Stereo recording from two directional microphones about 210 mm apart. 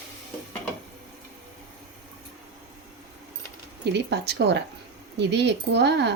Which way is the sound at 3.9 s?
50° right (ahead or behind).